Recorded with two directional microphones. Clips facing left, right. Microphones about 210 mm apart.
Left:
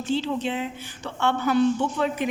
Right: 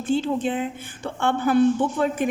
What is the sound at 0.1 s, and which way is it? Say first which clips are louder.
A woman's voice: right 3 dB; 50° right (ahead or behind).